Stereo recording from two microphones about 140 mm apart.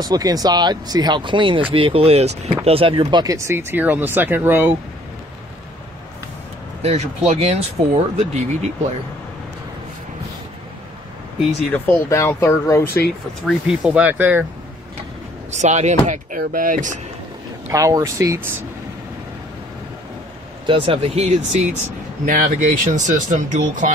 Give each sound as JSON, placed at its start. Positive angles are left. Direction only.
{"t": 0.0, "sound": "speech", "side_deg": -25}
{"t": 6.8, "sound": "speech", "side_deg": -50}
{"t": 11.7, "sound": "speech", "side_deg": 15}
{"t": 13.5, "sound": "speech", "side_deg": -5}
{"t": 15.5, "sound": "speech", "side_deg": -55}
{"t": 17.6, "sound": "speech", "side_deg": -25}
{"t": 20.6, "sound": "speech", "side_deg": -40}
{"t": 22.2, "sound": "speech", "side_deg": -75}